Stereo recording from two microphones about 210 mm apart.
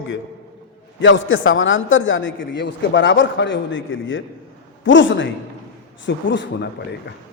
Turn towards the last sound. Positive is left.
turn(degrees=60)  # may be behind; listen again after turning